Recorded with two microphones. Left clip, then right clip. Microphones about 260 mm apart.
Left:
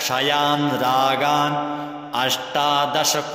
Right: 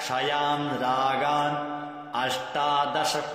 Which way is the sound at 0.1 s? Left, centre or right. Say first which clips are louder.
Left 6 dB; left.